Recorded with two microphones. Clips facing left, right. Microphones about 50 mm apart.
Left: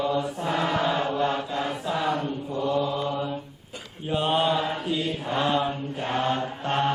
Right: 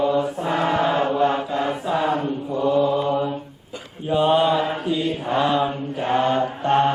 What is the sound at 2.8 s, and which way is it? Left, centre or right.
Mantra, centre.